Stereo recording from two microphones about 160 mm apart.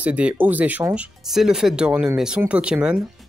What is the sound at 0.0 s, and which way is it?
Speech, 10° right (ahead or behind).